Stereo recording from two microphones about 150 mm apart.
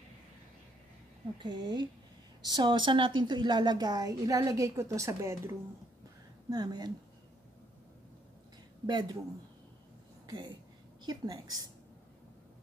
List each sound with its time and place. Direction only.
1.4 s a woman's voice: 30° right (ahead or behind)
8.8 s a woman's voice: 30° right (ahead or behind)
10.2 s a woman's voice: 30° right (ahead or behind)